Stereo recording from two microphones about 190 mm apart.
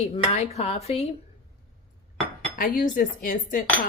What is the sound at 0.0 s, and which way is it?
Speech, 35° left (ahead or behind).